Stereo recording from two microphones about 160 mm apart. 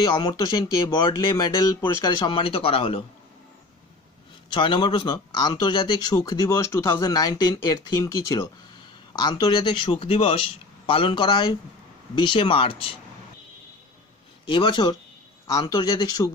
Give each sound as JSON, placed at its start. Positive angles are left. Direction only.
{"t": 0.8, "sound": "a man's voice", "side_deg": 20}
{"t": 4.5, "sound": "a man's voice", "side_deg": 30}
{"t": 14.5, "sound": "a man's voice", "side_deg": 30}